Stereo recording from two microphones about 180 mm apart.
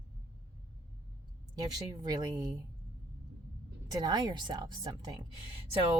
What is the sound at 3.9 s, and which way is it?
A woman's voice, 25° right (ahead or behind).